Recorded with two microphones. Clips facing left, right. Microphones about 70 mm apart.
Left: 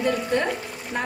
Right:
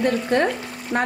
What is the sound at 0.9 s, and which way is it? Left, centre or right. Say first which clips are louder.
Speech: right 5 dB; right.